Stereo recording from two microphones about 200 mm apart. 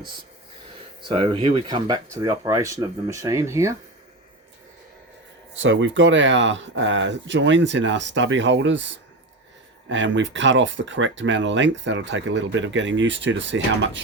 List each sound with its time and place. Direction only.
1.0 s speech: 25° right (ahead or behind)
5.5 s speech: 70° right (ahead or behind)
9.9 s speech: 65° right (ahead or behind)